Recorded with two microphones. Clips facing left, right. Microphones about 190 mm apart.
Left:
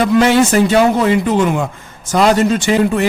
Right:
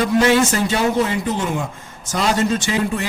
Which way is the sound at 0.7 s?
85° left.